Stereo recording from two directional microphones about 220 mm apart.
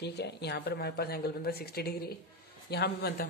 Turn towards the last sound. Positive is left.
turn(degrees=45)  # may be behind; listen again after turning